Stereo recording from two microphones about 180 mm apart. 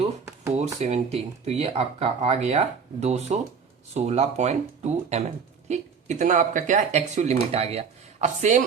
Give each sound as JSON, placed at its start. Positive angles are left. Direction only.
{"t": 0.5, "sound": "speech", "side_deg": -40}